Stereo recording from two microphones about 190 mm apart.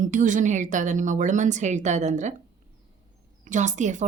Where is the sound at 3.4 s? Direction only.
40° right (ahead or behind).